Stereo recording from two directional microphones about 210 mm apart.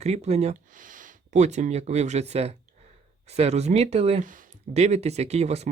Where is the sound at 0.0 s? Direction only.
30° right (ahead or behind).